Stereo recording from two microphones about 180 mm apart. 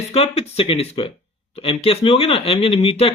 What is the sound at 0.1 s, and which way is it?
Speech, 35° left (ahead or behind).